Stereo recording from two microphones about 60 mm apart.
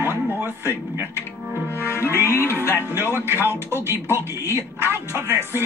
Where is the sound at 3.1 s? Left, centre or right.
Right.